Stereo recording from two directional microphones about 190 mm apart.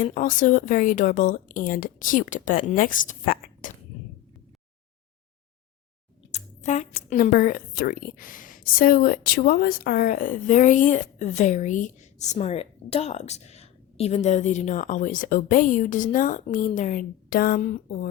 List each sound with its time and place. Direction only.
0.0 s a woman's voice: 45° left (ahead or behind)
6.3 s a woman's voice: 40° left (ahead or behind)